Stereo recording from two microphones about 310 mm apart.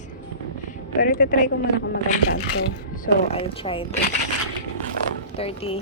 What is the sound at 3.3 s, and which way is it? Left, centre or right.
Speech, centre.